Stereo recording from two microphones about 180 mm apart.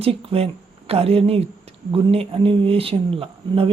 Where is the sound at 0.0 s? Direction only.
30° right (ahead or behind).